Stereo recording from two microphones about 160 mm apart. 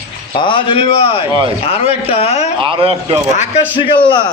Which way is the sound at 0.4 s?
35° left (ahead or behind).